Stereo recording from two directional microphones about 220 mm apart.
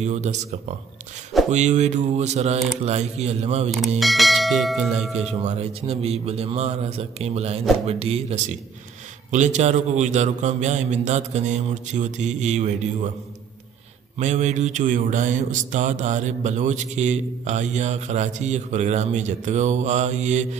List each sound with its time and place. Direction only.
0.0 s mantra: 30° right (ahead or behind)
2.8 s a man's voice: 30° right (ahead or behind)
4.0 s bell: centre (ahead or behind)
5.2 s a man's voice: 30° right (ahead or behind)
9.3 s mantra: 35° right (ahead or behind)
14.1 s mantra: 30° right (ahead or behind)